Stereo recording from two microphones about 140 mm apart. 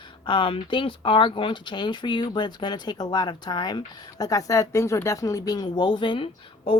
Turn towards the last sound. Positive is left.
turn(degrees=40)  # may be behind; listen again after turning